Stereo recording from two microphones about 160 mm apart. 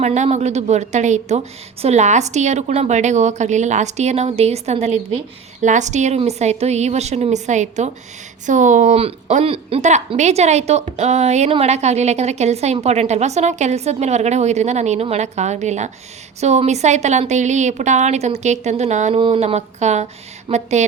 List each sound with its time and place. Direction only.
0.0 s a woman's voice: 45° right (ahead or behind)